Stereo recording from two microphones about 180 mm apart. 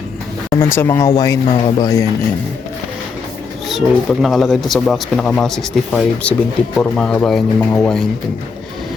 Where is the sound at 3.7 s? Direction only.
Centre (ahead or behind).